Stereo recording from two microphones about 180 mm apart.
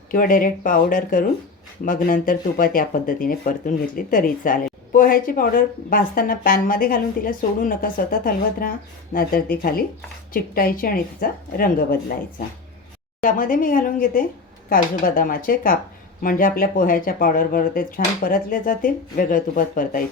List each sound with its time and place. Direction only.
0.1 s speech: 50° left (ahead or behind)
13.2 s speech: 50° left (ahead or behind)